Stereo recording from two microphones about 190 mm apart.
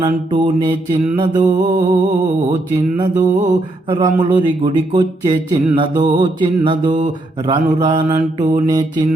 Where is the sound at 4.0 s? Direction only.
25° right (ahead or behind).